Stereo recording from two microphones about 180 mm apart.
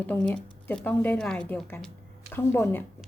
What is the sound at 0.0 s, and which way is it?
A woman's voice, 10° left (ahead or behind).